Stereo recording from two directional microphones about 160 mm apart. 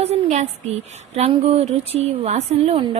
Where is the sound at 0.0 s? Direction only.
40° right (ahead or behind).